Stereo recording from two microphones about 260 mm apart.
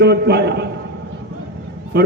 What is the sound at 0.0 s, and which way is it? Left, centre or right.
Speech, right.